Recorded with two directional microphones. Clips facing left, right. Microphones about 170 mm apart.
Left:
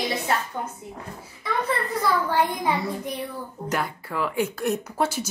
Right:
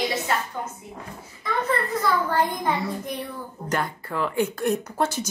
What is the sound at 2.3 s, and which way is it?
A woman's voice, 10° left (ahead or behind).